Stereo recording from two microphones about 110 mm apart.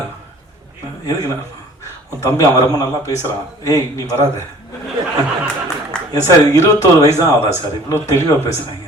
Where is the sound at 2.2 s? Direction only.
35° left (ahead or behind).